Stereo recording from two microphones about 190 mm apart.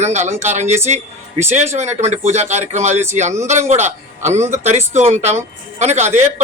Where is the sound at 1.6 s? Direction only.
35° right (ahead or behind).